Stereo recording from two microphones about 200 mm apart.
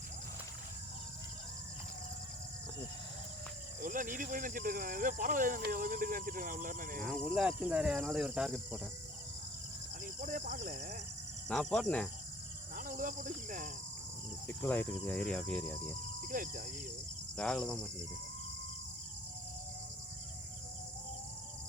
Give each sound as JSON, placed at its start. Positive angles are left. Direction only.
{"t": 3.8, "sound": "speech", "side_deg": -40}
{"t": 7.0, "sound": "insect", "side_deg": -5}
{"t": 10.2, "sound": "speech", "side_deg": -40}
{"t": 11.4, "sound": "insect", "side_deg": 0}
{"t": 12.7, "sound": "cricket", "side_deg": -40}
{"t": 14.4, "sound": "speech", "side_deg": 10}
{"t": 15.3, "sound": "insect", "side_deg": 5}
{"t": 16.3, "sound": "speech", "side_deg": -45}
{"t": 17.3, "sound": "insect", "side_deg": 5}